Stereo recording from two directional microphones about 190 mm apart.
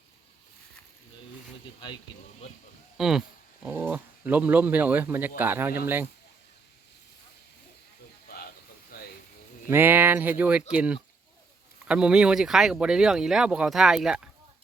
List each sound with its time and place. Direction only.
3.0 s speech: 5° right (ahead or behind)
8.9 s a sound: 50° left (ahead or behind)
9.6 s speech: 10° right (ahead or behind)